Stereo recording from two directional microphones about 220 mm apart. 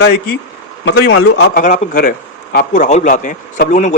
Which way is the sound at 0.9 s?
60° left (ahead or behind).